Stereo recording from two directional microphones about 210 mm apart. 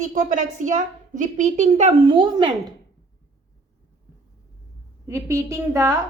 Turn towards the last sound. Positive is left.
turn(degrees=-15)  # may be behind; listen again after turning